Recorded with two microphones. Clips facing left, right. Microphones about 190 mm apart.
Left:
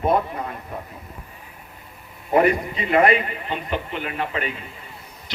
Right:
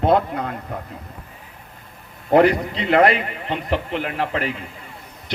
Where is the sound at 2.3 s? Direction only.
85° right.